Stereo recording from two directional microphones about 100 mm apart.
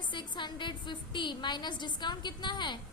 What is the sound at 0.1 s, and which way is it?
A woman's voice, 50° left (ahead or behind).